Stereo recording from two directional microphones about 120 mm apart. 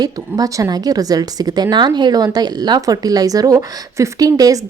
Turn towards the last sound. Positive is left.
turn(degrees=-30)  # may be behind; listen again after turning